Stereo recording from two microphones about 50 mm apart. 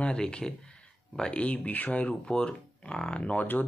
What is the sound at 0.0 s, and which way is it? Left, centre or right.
Speech, centre.